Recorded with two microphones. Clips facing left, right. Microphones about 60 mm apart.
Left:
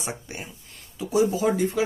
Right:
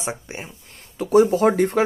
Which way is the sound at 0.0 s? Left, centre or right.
Right.